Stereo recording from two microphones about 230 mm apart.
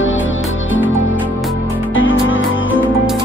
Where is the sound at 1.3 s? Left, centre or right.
Centre.